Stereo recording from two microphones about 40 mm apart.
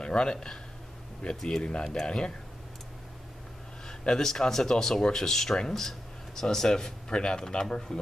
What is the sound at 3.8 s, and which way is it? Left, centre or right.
Speech, centre.